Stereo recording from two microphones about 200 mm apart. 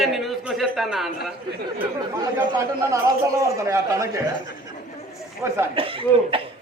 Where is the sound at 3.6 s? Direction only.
15° right (ahead or behind).